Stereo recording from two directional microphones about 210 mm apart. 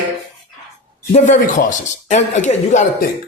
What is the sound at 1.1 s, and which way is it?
Speech, 35° left (ahead or behind).